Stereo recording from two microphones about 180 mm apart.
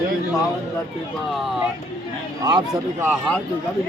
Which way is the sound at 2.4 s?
20° right (ahead or behind).